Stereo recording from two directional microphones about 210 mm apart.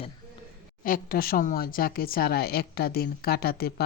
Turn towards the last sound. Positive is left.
turn(degrees=45)  # may be behind; listen again after turning